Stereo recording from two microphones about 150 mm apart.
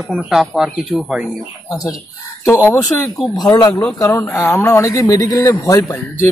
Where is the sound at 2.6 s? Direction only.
20° left (ahead or behind).